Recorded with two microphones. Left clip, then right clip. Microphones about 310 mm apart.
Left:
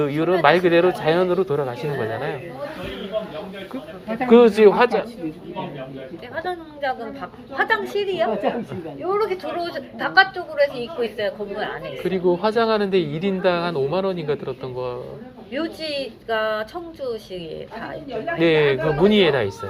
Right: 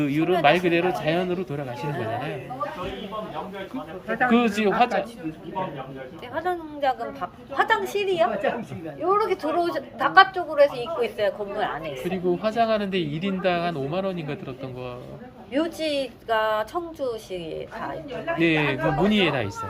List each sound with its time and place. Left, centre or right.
0.0 s speech: centre
4.3 s speech: centre
6.3 s a woman's voice: right
12.0 s speech: centre
15.5 s a woman's voice: right
18.3 s speech: centre